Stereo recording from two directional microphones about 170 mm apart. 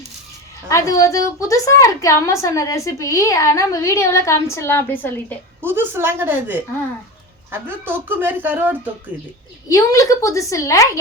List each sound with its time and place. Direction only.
0.7 s a woman's voice: 20° left (ahead or behind)
5.5 s speech: 10° right (ahead or behind)
9.6 s a woman's voice: 20° left (ahead or behind)